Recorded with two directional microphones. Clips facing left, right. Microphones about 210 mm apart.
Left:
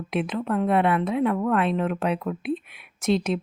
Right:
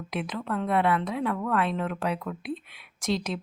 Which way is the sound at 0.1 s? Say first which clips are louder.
Left 6 dB; 25° left (ahead or behind).